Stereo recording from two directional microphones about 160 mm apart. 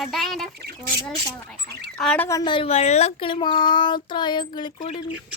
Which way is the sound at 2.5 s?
40° left (ahead or behind).